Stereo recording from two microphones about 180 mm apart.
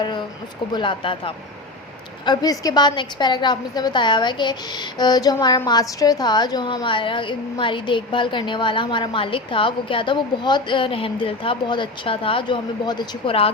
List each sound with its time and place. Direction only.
0.7 s a woman's voice: 25° left (ahead or behind)